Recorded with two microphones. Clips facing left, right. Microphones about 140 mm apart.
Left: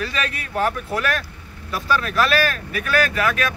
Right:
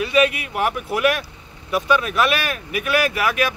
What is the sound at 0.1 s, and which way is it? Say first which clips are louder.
Speech: right 8 dB; 15° right (ahead or behind).